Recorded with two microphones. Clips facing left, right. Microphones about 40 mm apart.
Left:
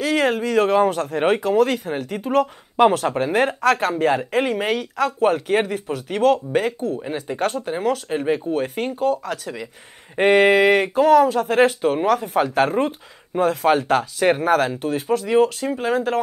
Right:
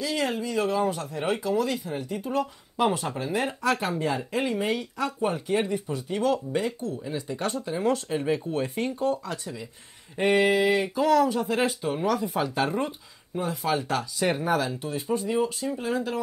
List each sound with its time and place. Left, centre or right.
0.0 s speech: left
9.0 s speech: left
10.1 s speech: left